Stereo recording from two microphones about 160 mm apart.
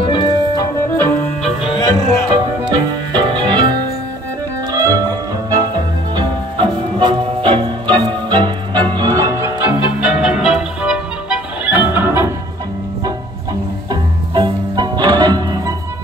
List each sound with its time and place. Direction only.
0.0 s organ: 30° left (ahead or behind)
1.6 s music: 30° left (ahead or behind)
2.7 s music: 30° right (ahead or behind)
6.1 s music: 30° right (ahead or behind)
9.1 s music: 20° right (ahead or behind)
9.9 s music: 5° right (ahead or behind)
14.3 s music: 25° right (ahead or behind)